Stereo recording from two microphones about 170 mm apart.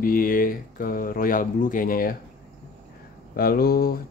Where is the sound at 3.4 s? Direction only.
60° left (ahead or behind).